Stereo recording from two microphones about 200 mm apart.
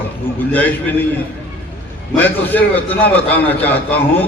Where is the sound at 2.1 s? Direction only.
10° left (ahead or behind).